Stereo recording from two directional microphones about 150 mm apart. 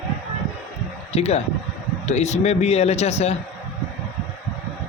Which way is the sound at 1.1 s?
45° left (ahead or behind).